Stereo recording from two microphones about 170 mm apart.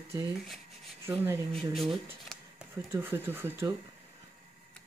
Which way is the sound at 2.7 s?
15° right (ahead or behind).